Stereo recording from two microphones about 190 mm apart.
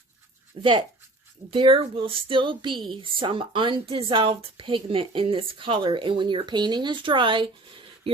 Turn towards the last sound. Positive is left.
turn(degrees=-25)  # may be behind; listen again after turning